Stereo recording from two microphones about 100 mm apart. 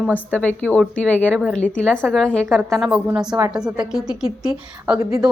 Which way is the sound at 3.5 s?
5° right (ahead or behind).